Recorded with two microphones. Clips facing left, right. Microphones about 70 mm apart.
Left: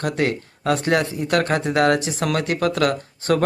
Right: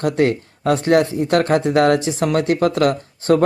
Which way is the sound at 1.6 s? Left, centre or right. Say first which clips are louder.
Right 3 dB; left.